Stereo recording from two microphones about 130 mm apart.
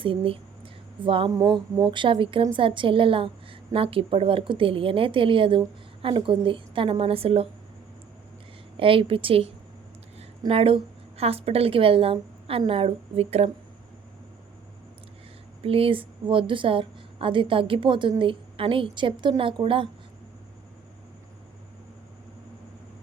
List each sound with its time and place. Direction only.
0.0 s a sound: 45° right (ahead or behind)
1.3 s a woman's voice: 30° right (ahead or behind); by 7.4 s 50° right (ahead or behind)
8.8 s a woman's voice: 45° right (ahead or behind)
15.6 s a woman's voice: 45° right (ahead or behind)